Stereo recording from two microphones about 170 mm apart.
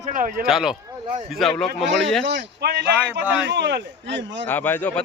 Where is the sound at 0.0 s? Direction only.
50° right (ahead or behind).